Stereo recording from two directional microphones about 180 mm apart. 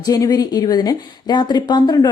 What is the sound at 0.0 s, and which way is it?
A woman's voice, 20° left (ahead or behind).